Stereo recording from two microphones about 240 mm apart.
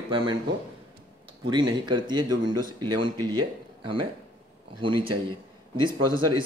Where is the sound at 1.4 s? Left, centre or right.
Centre.